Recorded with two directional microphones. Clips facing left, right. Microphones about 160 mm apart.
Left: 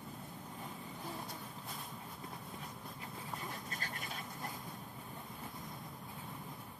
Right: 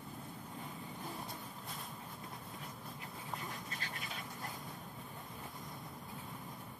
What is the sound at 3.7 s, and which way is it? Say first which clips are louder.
Duck: left 1 dB; 45° left (ahead or behind).